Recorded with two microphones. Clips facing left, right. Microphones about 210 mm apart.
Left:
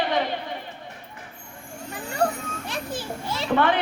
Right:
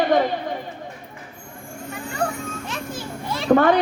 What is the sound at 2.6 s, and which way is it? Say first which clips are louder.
Children playing: even; 35° left (ahead or behind).